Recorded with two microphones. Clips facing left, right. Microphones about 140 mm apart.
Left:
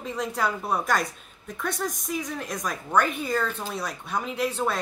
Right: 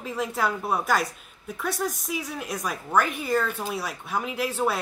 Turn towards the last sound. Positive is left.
turn(degrees=-5)  # may be behind; listen again after turning